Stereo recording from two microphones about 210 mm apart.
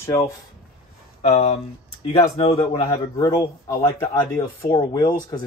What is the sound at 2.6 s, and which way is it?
Speech, 25° left (ahead or behind).